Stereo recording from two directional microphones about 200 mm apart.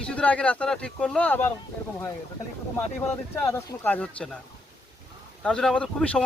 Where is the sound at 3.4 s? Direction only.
10° left (ahead or behind).